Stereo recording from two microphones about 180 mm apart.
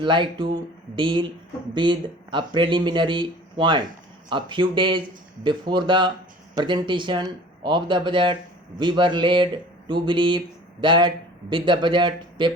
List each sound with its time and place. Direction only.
0.0 s speech: 25° right (ahead or behind)